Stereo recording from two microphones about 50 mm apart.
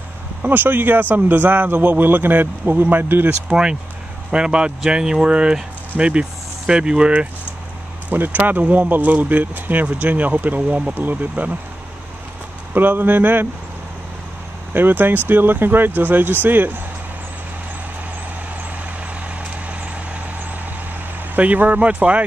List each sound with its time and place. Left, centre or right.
0.4 s a man's voice: right
4.3 s speech: centre
8.1 s a man's voice: right
12.7 s a man's voice: right
14.7 s a man's voice: right
19.2 s vehicle: right
21.4 s speech: right